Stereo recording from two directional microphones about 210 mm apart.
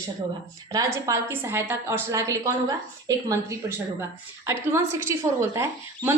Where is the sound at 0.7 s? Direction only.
15° right (ahead or behind).